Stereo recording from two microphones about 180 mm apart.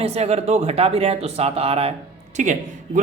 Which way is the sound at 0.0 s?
35° right (ahead or behind).